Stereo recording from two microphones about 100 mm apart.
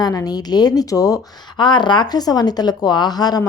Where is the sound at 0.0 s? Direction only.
40° left (ahead or behind).